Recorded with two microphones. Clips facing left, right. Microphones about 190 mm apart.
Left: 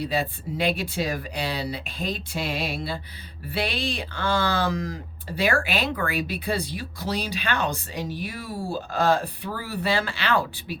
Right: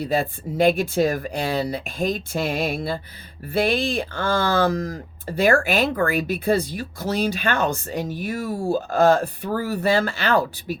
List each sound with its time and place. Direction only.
0.0 s speech: 45° right (ahead or behind)